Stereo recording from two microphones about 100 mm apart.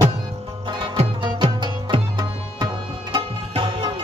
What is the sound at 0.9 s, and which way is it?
Music, 65° right (ahead or behind).